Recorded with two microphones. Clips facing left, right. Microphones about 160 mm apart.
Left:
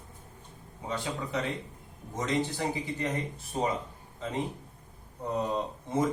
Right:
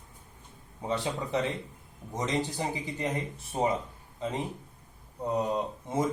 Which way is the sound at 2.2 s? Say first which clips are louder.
Left 1 dB; 15° right (ahead or behind).